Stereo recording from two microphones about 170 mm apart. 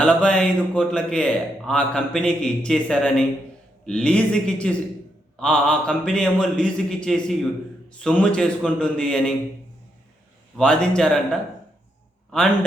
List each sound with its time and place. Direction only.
0.0 s a man's voice: 5° left (ahead or behind)
10.6 s a man's voice: 5° left (ahead or behind)